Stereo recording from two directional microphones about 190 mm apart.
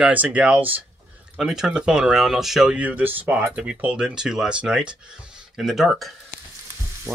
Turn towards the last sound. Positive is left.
turn(degrees=0)  # may be behind; listen again after turning